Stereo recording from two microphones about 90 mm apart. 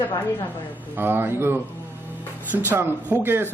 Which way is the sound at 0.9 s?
25° right (ahead or behind).